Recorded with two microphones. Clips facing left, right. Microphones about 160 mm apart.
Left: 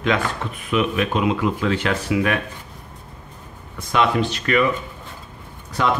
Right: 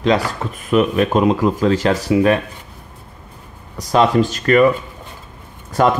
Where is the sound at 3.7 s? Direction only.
35° right (ahead or behind).